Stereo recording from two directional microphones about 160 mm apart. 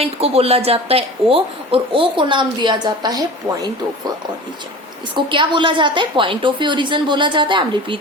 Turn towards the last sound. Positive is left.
turn(degrees=-30)  # may be behind; listen again after turning